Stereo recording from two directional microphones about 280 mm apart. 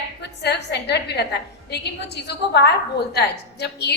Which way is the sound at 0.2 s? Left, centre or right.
Left.